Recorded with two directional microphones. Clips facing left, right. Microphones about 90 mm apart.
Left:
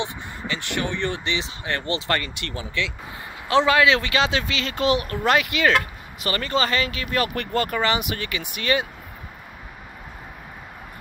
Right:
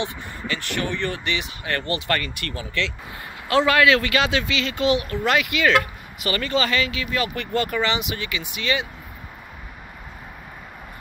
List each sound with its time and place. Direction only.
0.0 s speech: 20° left (ahead or behind); by 8.8 s 45° left (ahead or behind)